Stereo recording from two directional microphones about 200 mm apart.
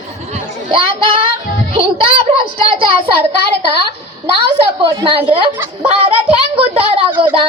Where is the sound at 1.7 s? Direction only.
25° right (ahead or behind).